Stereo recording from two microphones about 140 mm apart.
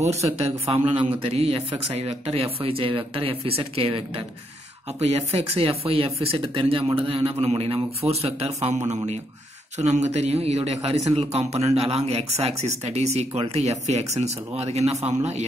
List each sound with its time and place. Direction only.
0.0 s speech: 50° right (ahead or behind)